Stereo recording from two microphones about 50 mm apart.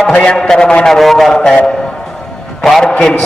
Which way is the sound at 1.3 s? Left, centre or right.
Centre.